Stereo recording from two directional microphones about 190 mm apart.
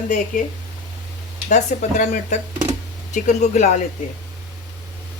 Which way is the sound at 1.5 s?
40° left (ahead or behind).